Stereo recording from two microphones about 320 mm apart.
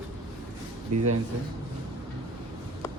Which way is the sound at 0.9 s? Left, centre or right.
Right.